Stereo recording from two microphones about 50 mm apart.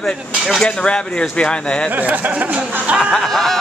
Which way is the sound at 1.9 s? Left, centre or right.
Right.